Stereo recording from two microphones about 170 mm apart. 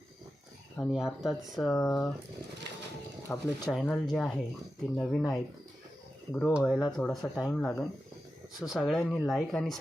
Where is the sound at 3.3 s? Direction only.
5° left (ahead or behind).